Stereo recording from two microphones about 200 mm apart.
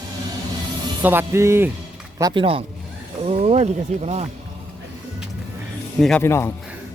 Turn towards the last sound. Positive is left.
turn(degrees=15)  # may be behind; listen again after turning